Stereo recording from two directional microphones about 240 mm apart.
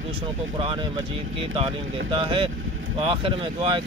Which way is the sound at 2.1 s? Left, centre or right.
Right.